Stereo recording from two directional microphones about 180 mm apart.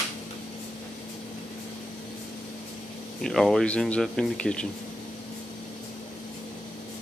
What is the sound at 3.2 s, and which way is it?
Speech, centre (ahead or behind).